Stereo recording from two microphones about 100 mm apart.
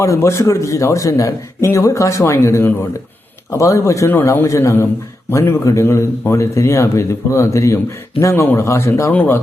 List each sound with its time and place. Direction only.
0.0 s a man's voice: 30° left (ahead or behind)